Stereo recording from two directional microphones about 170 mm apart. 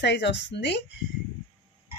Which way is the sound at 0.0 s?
90° left.